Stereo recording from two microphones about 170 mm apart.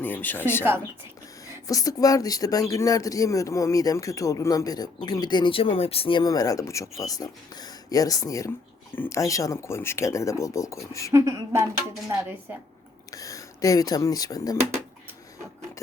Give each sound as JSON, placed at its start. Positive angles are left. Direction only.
{"t": 0.0, "sound": "speech", "side_deg": 10}
{"t": 1.6, "sound": "speech", "side_deg": 20}
{"t": 11.1, "sound": "speech", "side_deg": -15}
{"t": 13.1, "sound": "speech", "side_deg": 20}